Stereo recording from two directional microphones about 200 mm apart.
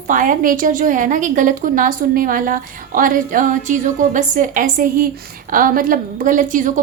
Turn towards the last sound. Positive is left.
turn(degrees=-40)  # may be behind; listen again after turning